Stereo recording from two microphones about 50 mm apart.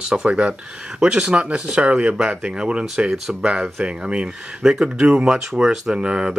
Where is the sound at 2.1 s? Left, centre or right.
Centre.